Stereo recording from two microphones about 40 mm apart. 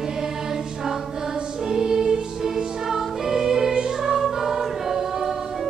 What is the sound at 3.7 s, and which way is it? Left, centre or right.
Music, right.